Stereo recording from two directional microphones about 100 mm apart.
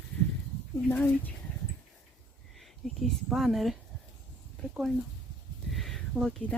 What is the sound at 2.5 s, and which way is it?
Speech, centre (ahead or behind).